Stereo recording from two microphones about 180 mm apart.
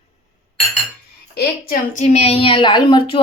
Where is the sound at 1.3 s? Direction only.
65° left (ahead or behind).